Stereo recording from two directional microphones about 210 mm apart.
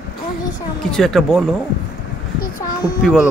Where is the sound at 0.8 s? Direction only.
Centre (ahead or behind).